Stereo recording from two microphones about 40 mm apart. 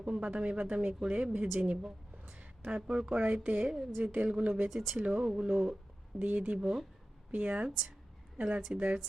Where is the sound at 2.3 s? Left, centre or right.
Right.